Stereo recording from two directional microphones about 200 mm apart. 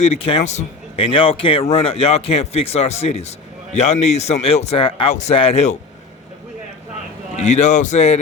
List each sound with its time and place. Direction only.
0.0 s speech: 30° left (ahead or behind)
7.3 s speech: 35° left (ahead or behind)